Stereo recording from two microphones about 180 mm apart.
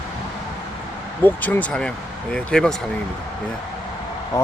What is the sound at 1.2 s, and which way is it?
Speech, 10° left (ahead or behind).